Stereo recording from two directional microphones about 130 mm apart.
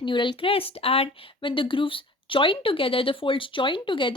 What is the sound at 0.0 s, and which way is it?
A woman's voice, 40° left (ahead or behind).